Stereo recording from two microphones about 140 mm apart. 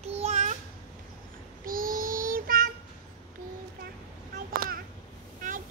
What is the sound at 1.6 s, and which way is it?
Child singing, 90° right.